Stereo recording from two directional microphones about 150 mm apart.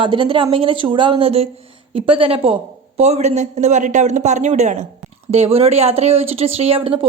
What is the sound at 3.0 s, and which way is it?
A man's voice, 45° right (ahead or behind).